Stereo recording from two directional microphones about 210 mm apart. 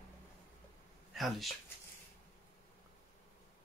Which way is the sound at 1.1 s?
Centre (ahead or behind).